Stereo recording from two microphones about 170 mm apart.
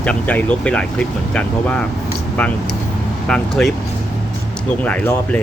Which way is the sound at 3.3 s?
5° left (ahead or behind).